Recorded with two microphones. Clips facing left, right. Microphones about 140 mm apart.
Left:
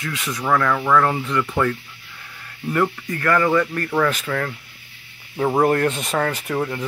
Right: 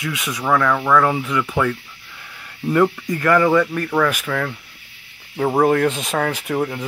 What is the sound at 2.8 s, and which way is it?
Speech, 15° right (ahead or behind).